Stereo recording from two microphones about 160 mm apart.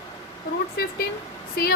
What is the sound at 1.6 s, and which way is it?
Speech, 75° left (ahead or behind).